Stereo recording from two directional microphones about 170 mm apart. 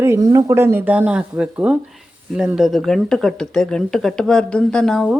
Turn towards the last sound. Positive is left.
turn(degrees=0)  # may be behind; listen again after turning